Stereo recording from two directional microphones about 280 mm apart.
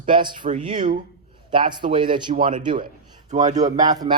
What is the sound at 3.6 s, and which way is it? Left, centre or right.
Speech, centre.